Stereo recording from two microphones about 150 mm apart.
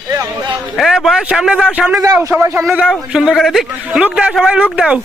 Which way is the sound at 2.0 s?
20° right (ahead or behind).